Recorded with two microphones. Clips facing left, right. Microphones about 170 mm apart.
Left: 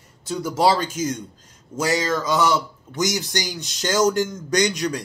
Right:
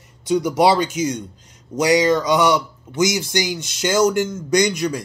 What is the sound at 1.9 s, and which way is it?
Speech, 15° right (ahead or behind).